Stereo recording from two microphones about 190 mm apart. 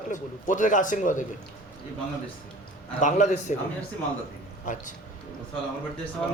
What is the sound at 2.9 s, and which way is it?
Speech, 40° left (ahead or behind).